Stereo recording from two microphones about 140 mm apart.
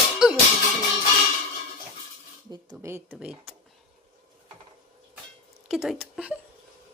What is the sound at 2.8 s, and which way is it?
Speech, 20° right (ahead or behind).